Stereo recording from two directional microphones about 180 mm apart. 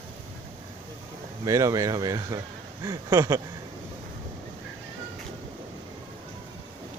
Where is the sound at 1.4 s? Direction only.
15° right (ahead or behind).